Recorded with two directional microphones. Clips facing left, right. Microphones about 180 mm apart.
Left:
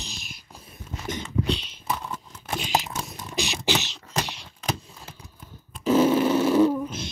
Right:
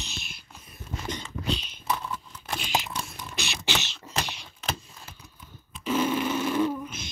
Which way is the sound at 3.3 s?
40° left (ahead or behind).